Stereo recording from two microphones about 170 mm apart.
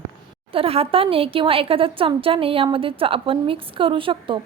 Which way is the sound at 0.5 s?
35° right (ahead or behind).